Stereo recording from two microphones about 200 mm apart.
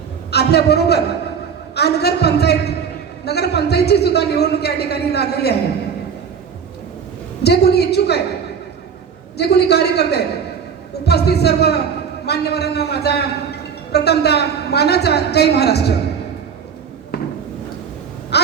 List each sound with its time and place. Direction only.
0.3 s a man's voice: 55° left (ahead or behind)
7.4 s a man's voice: 55° left (ahead or behind)
9.4 s a man's voice: 55° left (ahead or behind)